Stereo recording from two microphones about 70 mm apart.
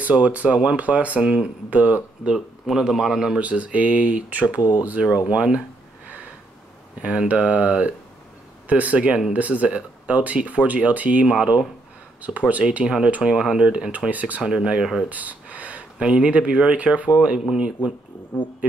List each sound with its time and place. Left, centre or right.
0.0 s speech: right
2.3 s speech: centre
3.3 s speech: centre
4.6 s speech: left
5.3 s speech: centre
7.0 s speech: centre
12.8 s speech: centre
15.0 s speech: right